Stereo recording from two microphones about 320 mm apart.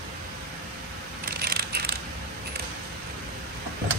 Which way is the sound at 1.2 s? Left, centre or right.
Right.